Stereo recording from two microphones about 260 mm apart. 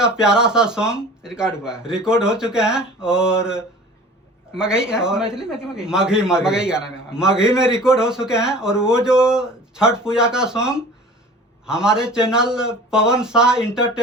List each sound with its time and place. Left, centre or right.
0.0 s a man's voice: centre